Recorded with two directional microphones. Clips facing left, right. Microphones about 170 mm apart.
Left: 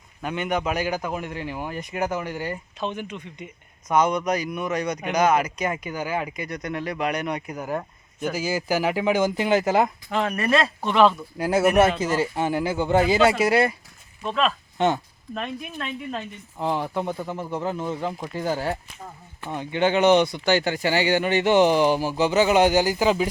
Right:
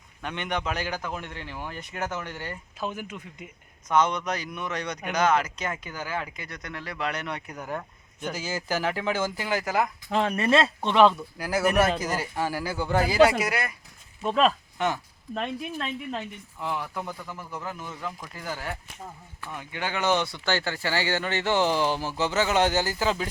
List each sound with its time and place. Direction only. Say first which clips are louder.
0.2 s speech: left 5 dB; 5° left (ahead or behind)
2.8 s speech: left 3 dB; 5° right (ahead or behind)
3.8 s speech: left 3 dB; 10° left (ahead or behind)
10.1 s speech: left 1 dB; 30° right (ahead or behind)
11.3 s speech: left 8 dB; 25° left (ahead or behind)
14.8 s speech: left 7 dB; 25° left (ahead or behind)
16.6 s speech: left 7 dB; 30° left (ahead or behind); by 23.3 s 15° left (ahead or behind)